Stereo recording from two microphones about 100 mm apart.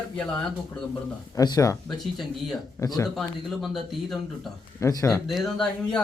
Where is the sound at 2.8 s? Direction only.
35° left (ahead or behind).